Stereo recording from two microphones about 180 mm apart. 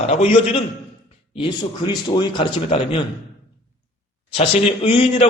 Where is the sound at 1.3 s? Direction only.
25° left (ahead or behind).